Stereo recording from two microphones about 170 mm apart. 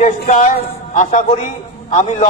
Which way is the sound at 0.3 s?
45° left (ahead or behind).